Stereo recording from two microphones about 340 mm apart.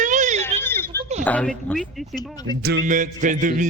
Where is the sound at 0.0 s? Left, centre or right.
Right.